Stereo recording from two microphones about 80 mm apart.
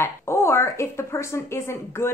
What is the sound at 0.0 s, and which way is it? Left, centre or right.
Speech, left.